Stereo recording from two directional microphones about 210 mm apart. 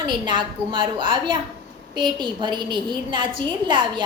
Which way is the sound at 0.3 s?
20° right (ahead or behind).